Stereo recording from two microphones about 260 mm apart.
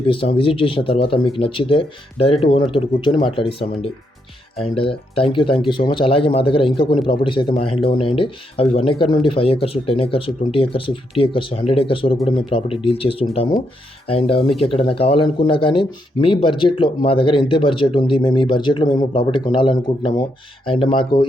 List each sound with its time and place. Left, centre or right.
0.0 s speech: left